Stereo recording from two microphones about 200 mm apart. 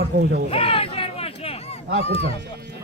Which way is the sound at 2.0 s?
30° left (ahead or behind).